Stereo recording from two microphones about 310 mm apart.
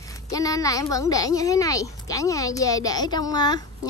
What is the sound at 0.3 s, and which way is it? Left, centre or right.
A woman's voice, centre.